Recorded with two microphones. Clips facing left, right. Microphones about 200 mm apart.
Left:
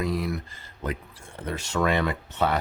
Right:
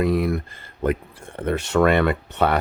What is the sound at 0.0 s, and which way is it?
Speech, 60° right (ahead or behind).